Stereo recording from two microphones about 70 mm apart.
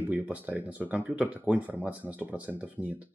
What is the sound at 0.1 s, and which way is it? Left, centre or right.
Speech, right.